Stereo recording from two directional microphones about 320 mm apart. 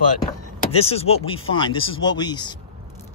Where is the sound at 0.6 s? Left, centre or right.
Centre.